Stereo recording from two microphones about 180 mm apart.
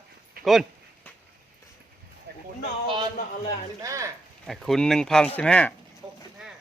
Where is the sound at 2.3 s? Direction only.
65° right (ahead or behind).